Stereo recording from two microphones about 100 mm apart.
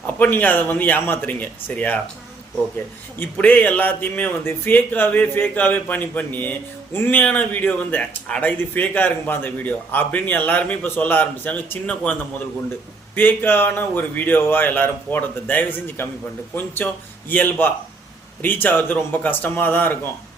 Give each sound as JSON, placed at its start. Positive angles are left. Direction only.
{"t": 0.2, "sound": "speech", "side_deg": 15}
{"t": 3.3, "sound": "speech", "side_deg": 15}
{"t": 13.1, "sound": "speech", "side_deg": 20}